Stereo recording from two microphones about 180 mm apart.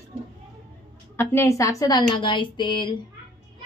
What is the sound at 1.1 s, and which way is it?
A woman's voice, 15° left (ahead or behind).